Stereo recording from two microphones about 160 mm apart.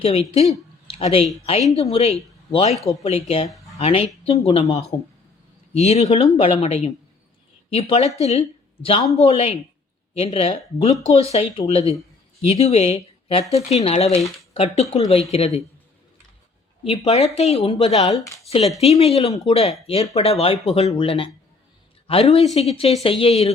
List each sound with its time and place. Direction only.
0.0 s speech: 40° left (ahead or behind)
16.8 s speech: 35° left (ahead or behind)